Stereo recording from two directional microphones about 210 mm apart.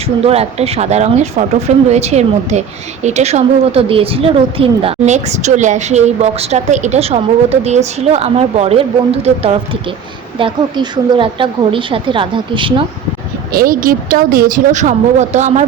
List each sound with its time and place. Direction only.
0.2 s a woman's voice: 30° right (ahead or behind)
13.5 s speech: 45° right (ahead or behind)